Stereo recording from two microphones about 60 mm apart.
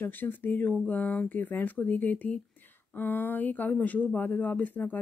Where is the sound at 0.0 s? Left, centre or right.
Left.